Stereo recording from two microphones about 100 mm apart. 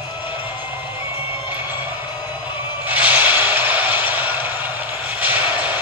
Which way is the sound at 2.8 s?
15° right (ahead or behind).